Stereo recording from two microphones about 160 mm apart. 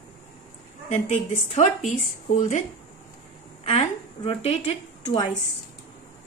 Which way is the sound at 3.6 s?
40° left (ahead or behind).